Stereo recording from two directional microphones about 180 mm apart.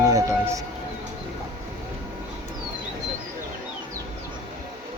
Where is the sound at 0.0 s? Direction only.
20° right (ahead or behind).